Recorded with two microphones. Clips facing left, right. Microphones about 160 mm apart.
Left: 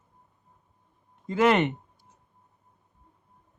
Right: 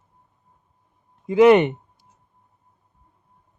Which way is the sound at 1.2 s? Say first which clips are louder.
Right 9 dB; 10° right (ahead or behind).